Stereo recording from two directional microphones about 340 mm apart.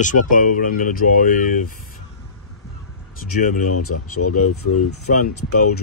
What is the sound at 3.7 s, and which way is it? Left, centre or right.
Speech, left.